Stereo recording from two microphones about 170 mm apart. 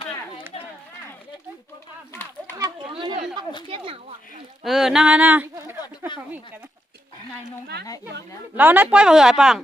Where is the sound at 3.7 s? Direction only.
35° right (ahead or behind).